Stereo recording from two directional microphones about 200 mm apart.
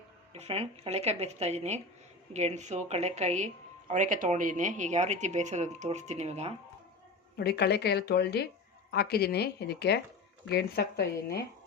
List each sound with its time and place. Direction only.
0.3 s speech: 30° right (ahead or behind)
7.3 s a woman's voice: 55° left (ahead or behind)